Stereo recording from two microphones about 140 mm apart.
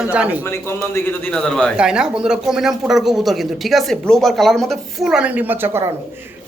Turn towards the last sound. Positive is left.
turn(degrees=-15)  # may be behind; listen again after turning